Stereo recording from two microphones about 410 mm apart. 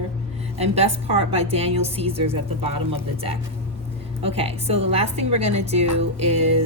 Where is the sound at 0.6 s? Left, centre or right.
Centre.